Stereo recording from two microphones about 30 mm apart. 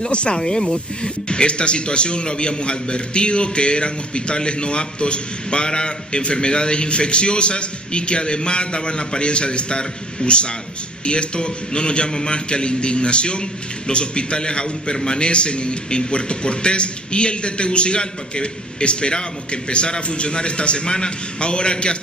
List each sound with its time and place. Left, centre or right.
0.1 s a man's voice: left
0.4 s a man's voice: left